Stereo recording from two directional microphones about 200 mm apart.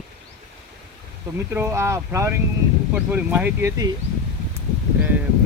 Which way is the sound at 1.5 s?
10° right (ahead or behind).